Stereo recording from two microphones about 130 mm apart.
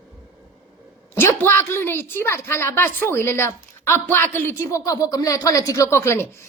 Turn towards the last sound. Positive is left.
turn(degrees=20)  # may be behind; listen again after turning